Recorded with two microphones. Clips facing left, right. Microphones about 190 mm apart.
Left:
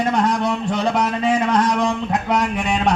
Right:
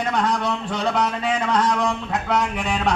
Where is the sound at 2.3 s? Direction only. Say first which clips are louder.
Left 1 dB; 20° left (ahead or behind).